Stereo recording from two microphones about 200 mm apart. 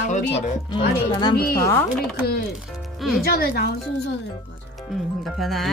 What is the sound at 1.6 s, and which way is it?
Speech, 10° left (ahead or behind).